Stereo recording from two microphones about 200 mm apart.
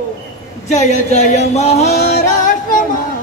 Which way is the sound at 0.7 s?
35° left (ahead or behind).